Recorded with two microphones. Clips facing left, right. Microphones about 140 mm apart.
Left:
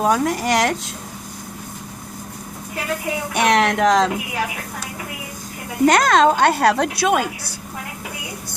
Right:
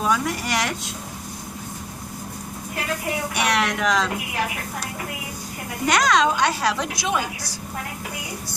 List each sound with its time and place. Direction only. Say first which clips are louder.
0.0 s a woman's voice: left 5 dB; 45° left (ahead or behind)
3.3 s a woman's voice: left 7 dB; 45° left (ahead or behind)
5.8 s a woman's voice: left 5 dB; 50° left (ahead or behind)